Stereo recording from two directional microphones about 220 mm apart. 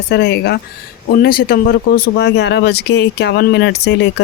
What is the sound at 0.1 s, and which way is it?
Speech, 50° left (ahead or behind).